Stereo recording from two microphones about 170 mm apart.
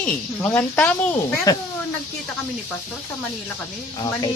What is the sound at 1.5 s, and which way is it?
Speech, 20° left (ahead or behind).